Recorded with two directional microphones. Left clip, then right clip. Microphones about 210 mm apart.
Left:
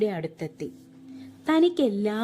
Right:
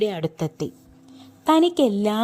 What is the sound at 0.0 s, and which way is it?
A woman's voice, 25° right (ahead or behind).